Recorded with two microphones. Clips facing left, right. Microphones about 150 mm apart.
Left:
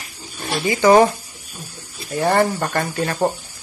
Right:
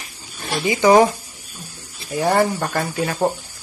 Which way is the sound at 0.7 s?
15° right (ahead or behind).